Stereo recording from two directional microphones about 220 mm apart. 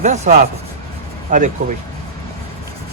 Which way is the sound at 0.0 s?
35° right (ahead or behind).